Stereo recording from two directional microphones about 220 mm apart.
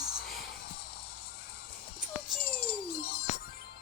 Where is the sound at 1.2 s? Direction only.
45° left (ahead or behind).